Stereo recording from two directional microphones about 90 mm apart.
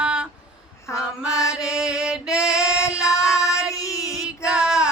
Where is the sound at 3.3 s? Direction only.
35° left (ahead or behind).